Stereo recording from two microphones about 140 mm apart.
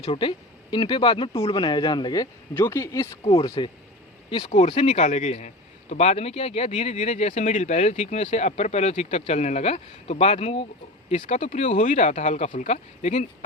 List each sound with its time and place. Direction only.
0.0 s speech: 40° left (ahead or behind); by 3.1 s 20° left (ahead or behind)
3.2 s speech: 30° left (ahead or behind); by 13.2 s 55° left (ahead or behind)